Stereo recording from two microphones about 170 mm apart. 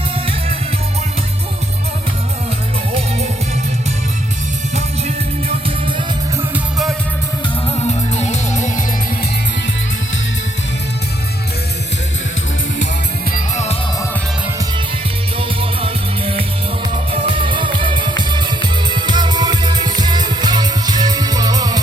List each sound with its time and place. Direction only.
4.7 s music: 40° right (ahead or behind)
6.5 s music: centre (ahead or behind)
7.8 s music: 40° left (ahead or behind)
13.3 s music: 40° left (ahead or behind)
15.4 s music: 35° right (ahead or behind)